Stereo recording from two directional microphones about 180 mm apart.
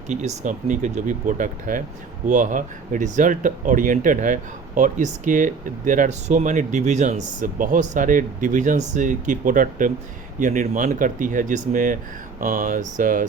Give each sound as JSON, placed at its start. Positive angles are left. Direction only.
{"t": 0.1, "sound": "speech", "side_deg": -40}